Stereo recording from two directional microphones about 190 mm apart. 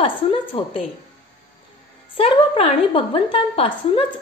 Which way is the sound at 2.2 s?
30° left (ahead or behind).